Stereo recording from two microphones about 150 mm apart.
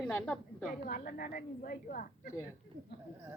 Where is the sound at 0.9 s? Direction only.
75° left (ahead or behind).